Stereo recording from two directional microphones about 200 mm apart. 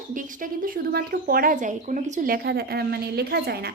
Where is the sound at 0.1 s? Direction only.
40° right (ahead or behind).